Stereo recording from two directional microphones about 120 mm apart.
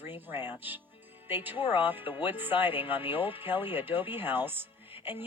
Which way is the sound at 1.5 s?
45° left (ahead or behind).